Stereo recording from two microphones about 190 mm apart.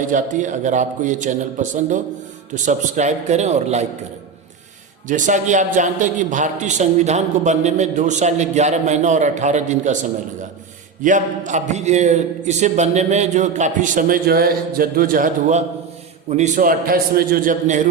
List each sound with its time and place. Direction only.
0.1 s a man's voice: 40° right (ahead or behind)
5.0 s a man's voice: 40° right (ahead or behind)